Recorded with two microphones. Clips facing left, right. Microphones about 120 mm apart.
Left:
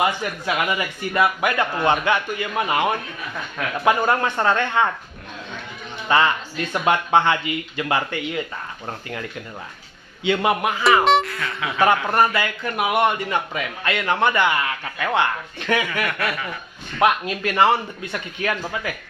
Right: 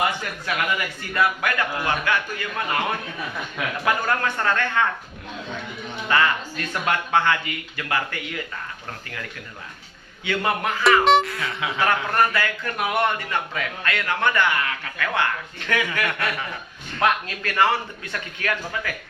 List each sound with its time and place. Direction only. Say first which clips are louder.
0.0 s a man's voice: left 3 dB; 20° left (ahead or behind)
6.1 s a man's voice: left 3 dB; 25° left (ahead or behind)
10.2 s a man's voice: left 4 dB; 20° left (ahead or behind)
11.0 s speech: even; centre (ahead or behind)
12.0 s a man's voice: left 2 dB; 20° left (ahead or behind)